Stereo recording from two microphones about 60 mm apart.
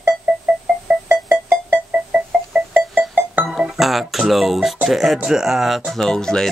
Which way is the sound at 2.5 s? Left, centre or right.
Centre.